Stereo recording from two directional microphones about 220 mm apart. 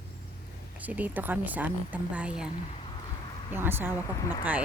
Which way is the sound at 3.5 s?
10° right (ahead or behind).